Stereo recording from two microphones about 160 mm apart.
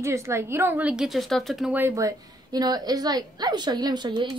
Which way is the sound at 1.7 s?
15° right (ahead or behind).